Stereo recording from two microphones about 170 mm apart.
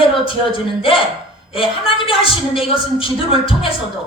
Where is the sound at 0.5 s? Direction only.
30° left (ahead or behind).